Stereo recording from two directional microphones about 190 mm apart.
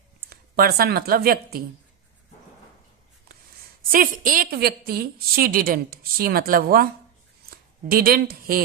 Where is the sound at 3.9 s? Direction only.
45° right (ahead or behind).